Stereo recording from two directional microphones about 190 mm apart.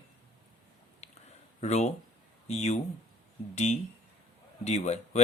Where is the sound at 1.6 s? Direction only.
35° left (ahead or behind).